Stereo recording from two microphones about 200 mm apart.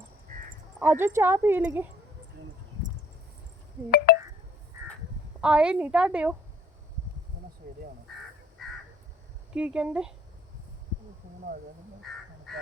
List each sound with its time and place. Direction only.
0.8 s speech: 10° right (ahead or behind)
3.9 s telephone dialing: 50° left (ahead or behind)
4.7 s crow: 15° right (ahead or behind)
5.4 s a woman's voice: 5° right (ahead or behind)
8.6 s crow: centre (ahead or behind)
9.6 s a woman's voice: 5° right (ahead or behind)
12.5 s crow: centre (ahead or behind)